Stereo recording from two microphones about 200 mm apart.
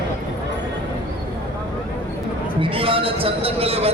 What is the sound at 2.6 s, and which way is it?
A man's voice, 25° right (ahead or behind).